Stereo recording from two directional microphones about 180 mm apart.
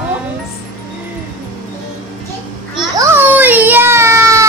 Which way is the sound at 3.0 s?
10° right (ahead or behind).